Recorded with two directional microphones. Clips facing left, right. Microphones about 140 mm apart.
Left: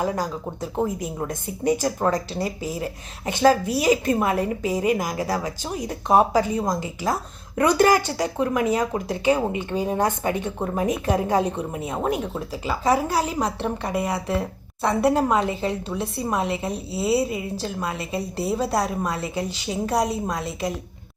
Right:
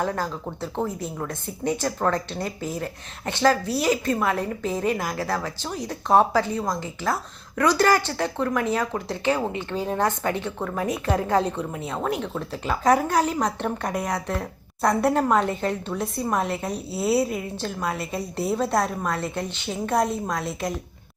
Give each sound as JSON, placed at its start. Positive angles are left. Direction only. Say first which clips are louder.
{"t": 0.0, "sound": "speech", "louder": "left 1 dB", "side_deg": 10}
{"t": 10.6, "sound": "a woman's voice", "louder": "left 3 dB", "side_deg": 25}